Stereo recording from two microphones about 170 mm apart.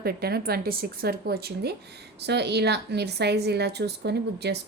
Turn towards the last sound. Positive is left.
turn(degrees=-80)